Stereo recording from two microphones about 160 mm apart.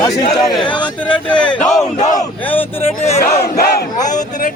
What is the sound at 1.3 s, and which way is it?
Speech, 5° left (ahead or behind).